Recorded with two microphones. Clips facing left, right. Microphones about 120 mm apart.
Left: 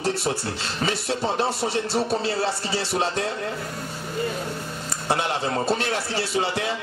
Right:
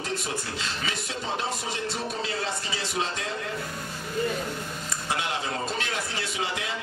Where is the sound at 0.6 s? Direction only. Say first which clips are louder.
Left 6 dB; 35° left (ahead or behind).